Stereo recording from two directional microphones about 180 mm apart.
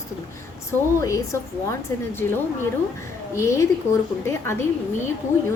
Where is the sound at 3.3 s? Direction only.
15° left (ahead or behind).